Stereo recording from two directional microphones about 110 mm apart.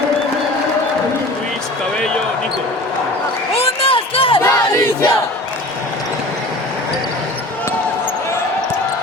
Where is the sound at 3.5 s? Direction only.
55° left (ahead or behind).